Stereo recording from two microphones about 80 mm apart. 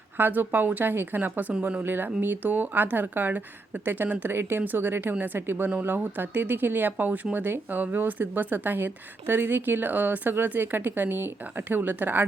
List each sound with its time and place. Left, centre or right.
0.2 s speech: right